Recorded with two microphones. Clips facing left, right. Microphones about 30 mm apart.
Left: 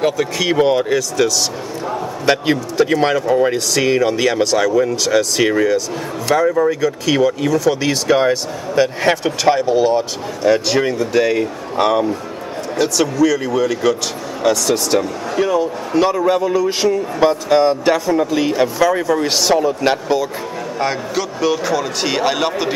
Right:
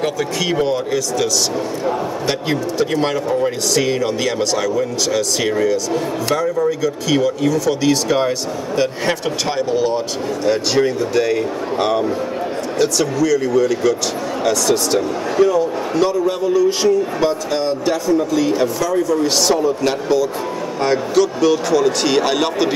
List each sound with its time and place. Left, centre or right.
0.0 s speech: centre
0.6 s a man's voice: centre
0.9 s speech: centre
6.4 s speech: left
6.7 s speech: centre
15.9 s a man's voice: centre
19.3 s speech: centre
20.8 s a man's voice: centre